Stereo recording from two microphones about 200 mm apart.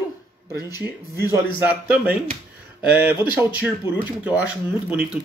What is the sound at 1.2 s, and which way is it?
Speech, 10° right (ahead or behind).